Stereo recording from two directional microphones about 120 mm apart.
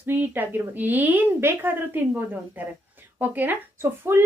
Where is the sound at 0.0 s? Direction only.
15° right (ahead or behind).